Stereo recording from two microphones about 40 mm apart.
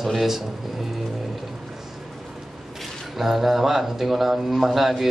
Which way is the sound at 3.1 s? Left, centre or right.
Centre.